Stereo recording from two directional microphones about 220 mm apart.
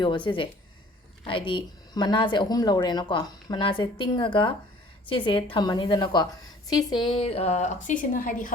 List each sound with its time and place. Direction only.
0.0 s a woman's voice: 20° left (ahead or behind); by 8.5 s 40° left (ahead or behind)